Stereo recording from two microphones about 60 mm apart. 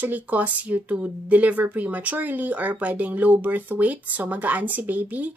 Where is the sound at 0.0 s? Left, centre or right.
Right.